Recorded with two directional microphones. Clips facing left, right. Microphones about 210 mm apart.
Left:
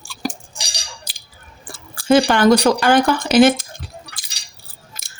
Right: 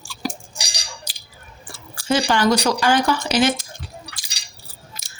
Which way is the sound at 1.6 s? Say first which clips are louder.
Left 7 dB; 55° left (ahead or behind).